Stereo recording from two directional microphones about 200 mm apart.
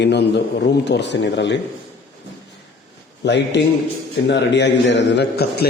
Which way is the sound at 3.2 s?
60° left (ahead or behind).